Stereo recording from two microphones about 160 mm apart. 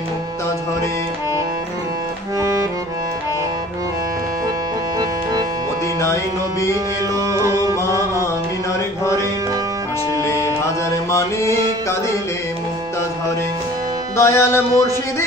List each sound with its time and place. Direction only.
2.3 s music: 20° right (ahead or behind)
7.2 s music: 20° right (ahead or behind)
8.7 s music: 20° left (ahead or behind)
11.1 s music: 20° left (ahead or behind)
14.1 s music: 15° left (ahead or behind)